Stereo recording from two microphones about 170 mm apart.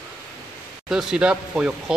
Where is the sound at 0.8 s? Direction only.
5° right (ahead or behind).